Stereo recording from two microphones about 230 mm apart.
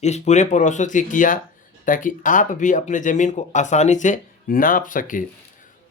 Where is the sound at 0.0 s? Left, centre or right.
Left.